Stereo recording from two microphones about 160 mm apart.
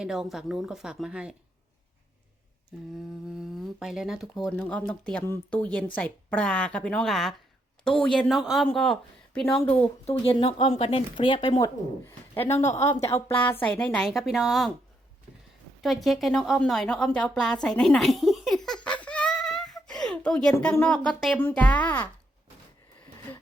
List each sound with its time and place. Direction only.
0.0 s speech: centre (ahead or behind)
3.2 s a woman's voice: 5° right (ahead or behind)
10.1 s speech: 35° left (ahead or behind)
11.6 s a woman's voice: 15° left (ahead or behind); by 14.7 s centre (ahead or behind)
15.8 s a woman's voice: centre (ahead or behind)